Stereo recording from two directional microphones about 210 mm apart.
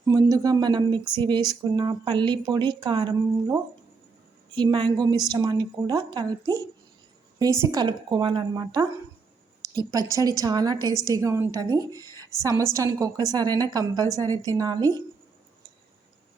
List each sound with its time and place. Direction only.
0.0 s a woman's voice: 15° right (ahead or behind)